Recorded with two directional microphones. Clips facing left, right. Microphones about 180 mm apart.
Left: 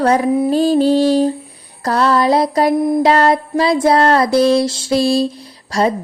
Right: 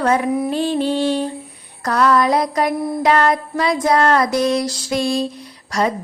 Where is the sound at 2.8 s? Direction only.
20° left (ahead or behind).